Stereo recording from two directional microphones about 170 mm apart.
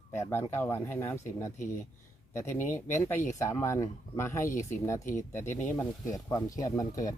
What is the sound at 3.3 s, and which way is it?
Speech, 15° left (ahead or behind).